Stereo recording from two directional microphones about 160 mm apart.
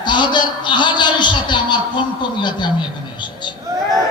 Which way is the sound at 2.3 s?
30° left (ahead or behind).